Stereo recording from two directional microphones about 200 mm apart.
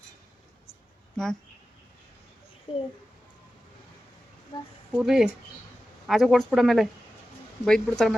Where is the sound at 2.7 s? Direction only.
25° left (ahead or behind).